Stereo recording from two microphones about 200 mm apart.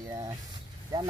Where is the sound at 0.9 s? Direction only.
15° right (ahead or behind).